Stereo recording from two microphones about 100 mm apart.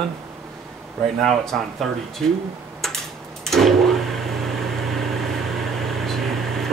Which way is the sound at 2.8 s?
5° left (ahead or behind).